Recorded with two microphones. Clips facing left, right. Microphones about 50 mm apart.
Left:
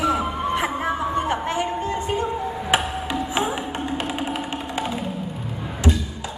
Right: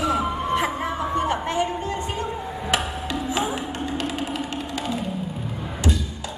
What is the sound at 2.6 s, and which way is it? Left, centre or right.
Music, left.